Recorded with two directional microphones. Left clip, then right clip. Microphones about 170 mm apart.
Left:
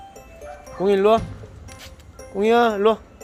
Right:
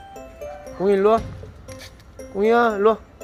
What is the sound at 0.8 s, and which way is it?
Speech, 20° left (ahead or behind).